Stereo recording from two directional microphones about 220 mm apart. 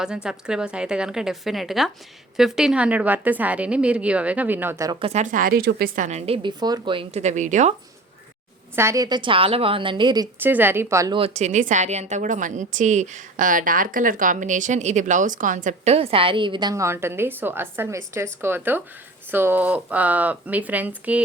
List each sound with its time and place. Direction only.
0.0 s a woman's voice: 5° right (ahead or behind); by 7.7 s 35° right (ahead or behind)
8.7 s a woman's voice: 10° right (ahead or behind)
10.4 s a woman's voice: 10° right (ahead or behind)
11.2 s a woman's voice: 30° right (ahead or behind); by 21.2 s 5° right (ahead or behind)